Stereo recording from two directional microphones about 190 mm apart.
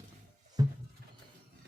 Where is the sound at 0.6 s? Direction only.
20° right (ahead or behind).